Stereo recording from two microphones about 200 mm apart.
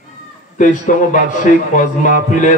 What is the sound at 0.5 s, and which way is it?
Speech, 40° left (ahead or behind).